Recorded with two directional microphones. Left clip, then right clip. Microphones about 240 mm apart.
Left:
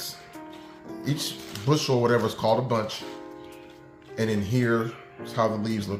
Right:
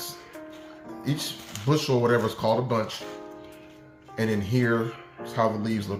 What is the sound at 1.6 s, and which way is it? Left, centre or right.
Speech, centre.